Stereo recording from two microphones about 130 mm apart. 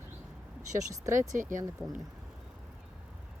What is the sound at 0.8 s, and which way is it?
Speech, 25° right (ahead or behind).